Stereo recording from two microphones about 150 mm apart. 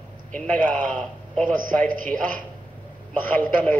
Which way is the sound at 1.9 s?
65° right (ahead or behind).